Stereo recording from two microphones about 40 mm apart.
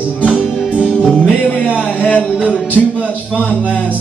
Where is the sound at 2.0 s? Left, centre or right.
Left.